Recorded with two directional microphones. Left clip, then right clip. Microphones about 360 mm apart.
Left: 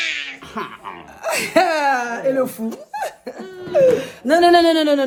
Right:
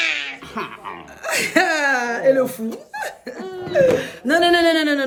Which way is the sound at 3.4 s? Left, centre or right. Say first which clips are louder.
Right 3 dB; centre.